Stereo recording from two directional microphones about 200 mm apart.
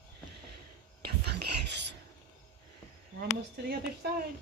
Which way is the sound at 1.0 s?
55° right (ahead or behind).